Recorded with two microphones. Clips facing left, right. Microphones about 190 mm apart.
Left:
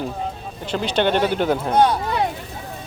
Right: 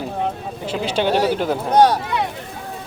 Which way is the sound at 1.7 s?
40° right (ahead or behind).